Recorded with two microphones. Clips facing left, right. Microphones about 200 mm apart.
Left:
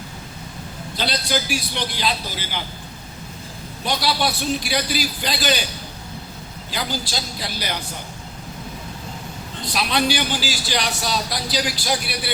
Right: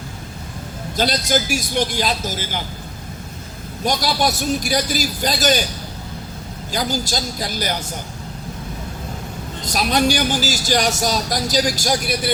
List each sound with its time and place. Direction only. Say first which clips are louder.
0.9 s a man's voice: right 5 dB; 45° right (ahead or behind)
3.8 s a man's voice: right 3 dB; 45° right (ahead or behind)
6.7 s a man's voice: right 5 dB; 45° right (ahead or behind)
9.6 s a man's voice: right 3 dB; 45° right (ahead or behind)